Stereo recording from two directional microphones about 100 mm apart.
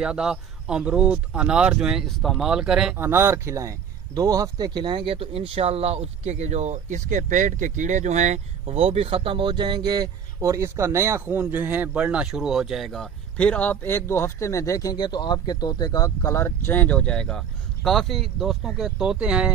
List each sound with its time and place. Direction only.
0.0 s speech: 5° right (ahead or behind)
3.0 s speech: 25° right (ahead or behind); by 6.5 s 90° right
8.6 s speech: 80° right; by 10.0 s 45° right (ahead or behind)
10.4 s speech: 30° right (ahead or behind); by 19.5 s 10° right (ahead or behind)